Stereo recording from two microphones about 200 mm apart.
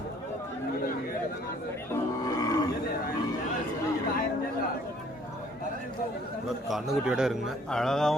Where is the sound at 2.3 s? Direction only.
20° left (ahead or behind).